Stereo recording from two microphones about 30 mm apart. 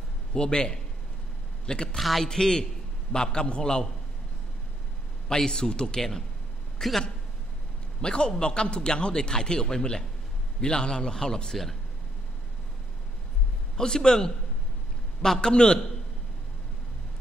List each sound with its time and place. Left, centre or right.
0.3 s a man's voice: left
2.0 s speech: centre
2.2 s a man's voice: centre
5.3 s a man's voice: left
5.9 s speech: centre
8.0 s a man's voice: left
13.7 s a man's voice: left
15.4 s a man's voice: left